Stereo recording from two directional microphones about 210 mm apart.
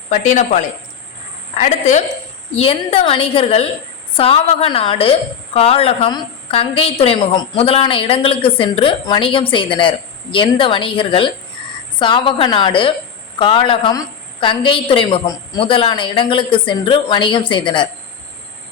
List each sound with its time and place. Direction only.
0.3 s a woman's voice: 35° left (ahead or behind)